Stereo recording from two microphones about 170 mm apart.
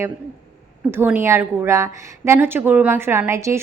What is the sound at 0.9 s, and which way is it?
A woman's voice, 15° right (ahead or behind).